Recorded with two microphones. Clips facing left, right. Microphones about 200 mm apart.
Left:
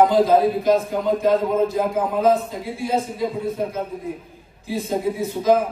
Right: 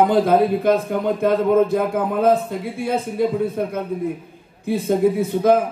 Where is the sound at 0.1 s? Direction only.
55° right (ahead or behind).